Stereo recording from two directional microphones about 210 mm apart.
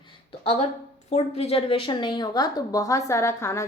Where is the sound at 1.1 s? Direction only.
30° left (ahead or behind); by 3.6 s 15° left (ahead or behind).